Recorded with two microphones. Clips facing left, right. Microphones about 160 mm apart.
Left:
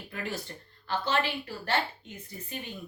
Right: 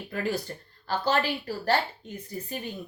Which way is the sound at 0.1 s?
35° right (ahead or behind).